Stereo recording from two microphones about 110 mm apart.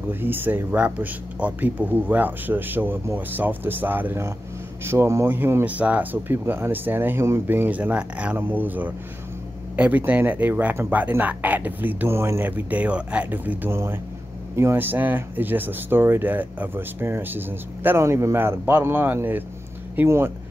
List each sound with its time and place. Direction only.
0.1 s speech: 20° right (ahead or behind)